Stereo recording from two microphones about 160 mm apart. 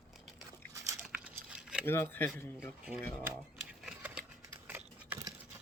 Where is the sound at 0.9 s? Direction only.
10° right (ahead or behind).